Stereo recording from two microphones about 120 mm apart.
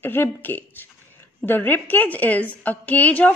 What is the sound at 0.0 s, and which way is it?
A woman's voice, 15° left (ahead or behind).